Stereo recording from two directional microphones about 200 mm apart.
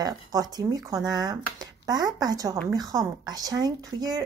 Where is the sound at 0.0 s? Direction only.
20° right (ahead or behind).